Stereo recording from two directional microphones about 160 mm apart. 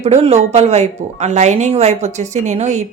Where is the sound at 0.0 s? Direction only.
40° right (ahead or behind).